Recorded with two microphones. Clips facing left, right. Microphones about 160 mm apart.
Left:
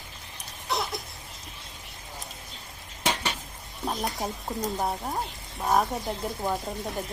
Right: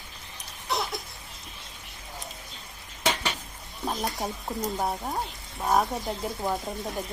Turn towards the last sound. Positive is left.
turn(degrees=0)  # may be behind; listen again after turning